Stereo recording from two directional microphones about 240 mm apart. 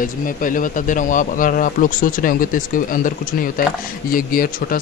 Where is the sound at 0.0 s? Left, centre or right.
Left.